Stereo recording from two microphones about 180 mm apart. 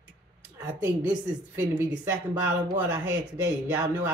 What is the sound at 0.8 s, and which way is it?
A woman's voice, 15° right (ahead or behind).